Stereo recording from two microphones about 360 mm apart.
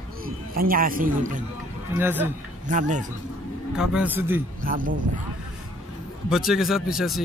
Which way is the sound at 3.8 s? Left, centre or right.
Centre.